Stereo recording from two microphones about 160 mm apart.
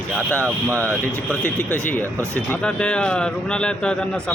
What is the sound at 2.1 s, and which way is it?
Speech, 15° right (ahead or behind).